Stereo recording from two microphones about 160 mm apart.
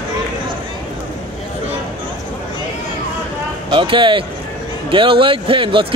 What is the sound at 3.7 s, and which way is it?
Speech, 30° right (ahead or behind).